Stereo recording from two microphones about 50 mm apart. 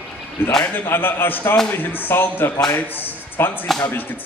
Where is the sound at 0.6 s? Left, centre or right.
Left.